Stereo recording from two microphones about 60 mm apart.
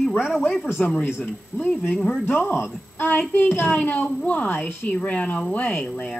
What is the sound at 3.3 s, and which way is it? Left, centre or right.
A woman's voice, left.